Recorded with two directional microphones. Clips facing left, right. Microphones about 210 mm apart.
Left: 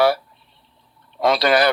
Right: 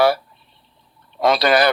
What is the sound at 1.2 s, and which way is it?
Speech, 50° right (ahead or behind).